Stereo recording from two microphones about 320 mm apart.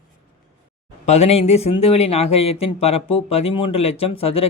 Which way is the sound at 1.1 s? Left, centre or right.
Centre.